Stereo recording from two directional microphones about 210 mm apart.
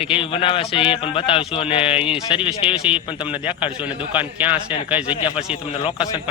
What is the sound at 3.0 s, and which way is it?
Speech, 25° left (ahead or behind).